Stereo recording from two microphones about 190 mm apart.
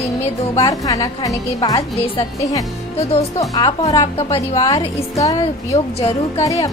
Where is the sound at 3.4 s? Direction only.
20° left (ahead or behind).